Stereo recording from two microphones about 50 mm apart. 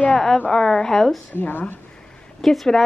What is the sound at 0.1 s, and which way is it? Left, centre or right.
Speech, centre.